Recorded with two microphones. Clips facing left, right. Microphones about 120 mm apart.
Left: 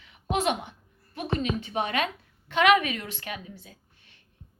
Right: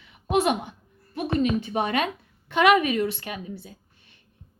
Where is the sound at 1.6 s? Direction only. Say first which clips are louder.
Right 3 dB; 40° right (ahead or behind).